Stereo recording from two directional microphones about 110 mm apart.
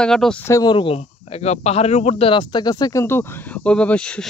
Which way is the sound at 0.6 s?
50° left (ahead or behind).